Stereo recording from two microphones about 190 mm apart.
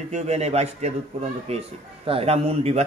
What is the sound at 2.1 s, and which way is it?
Speech, 30° right (ahead or behind).